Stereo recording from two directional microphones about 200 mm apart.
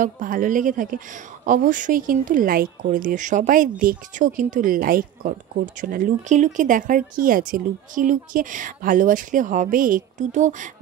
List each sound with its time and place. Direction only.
0.0 s speech: 40° right (ahead or behind)